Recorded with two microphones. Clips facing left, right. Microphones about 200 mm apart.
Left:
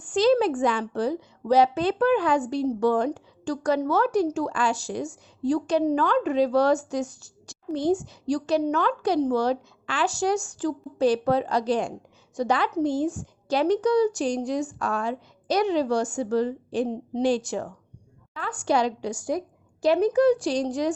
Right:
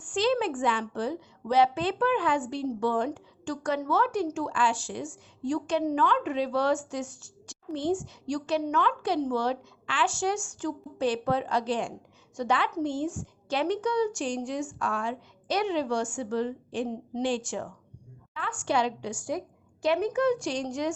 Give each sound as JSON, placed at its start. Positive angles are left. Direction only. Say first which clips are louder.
{"t": 0.0, "sound": "a woman's voice", "louder": "left 6 dB", "side_deg": 40}